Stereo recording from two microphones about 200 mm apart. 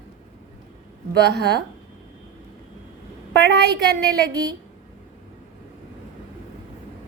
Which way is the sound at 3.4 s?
55° right (ahead or behind).